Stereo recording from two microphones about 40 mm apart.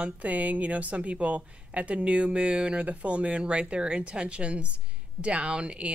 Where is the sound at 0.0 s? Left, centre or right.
Right.